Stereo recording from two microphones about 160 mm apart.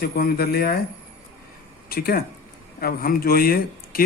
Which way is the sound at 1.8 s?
70° left (ahead or behind).